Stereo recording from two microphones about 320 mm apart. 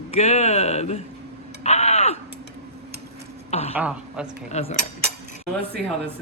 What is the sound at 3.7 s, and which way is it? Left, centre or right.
Speech, centre.